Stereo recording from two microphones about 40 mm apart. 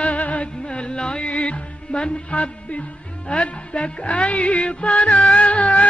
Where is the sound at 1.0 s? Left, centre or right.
Left.